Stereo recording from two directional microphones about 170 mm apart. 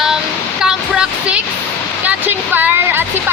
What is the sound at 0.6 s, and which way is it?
Waterfall, 5° right (ahead or behind).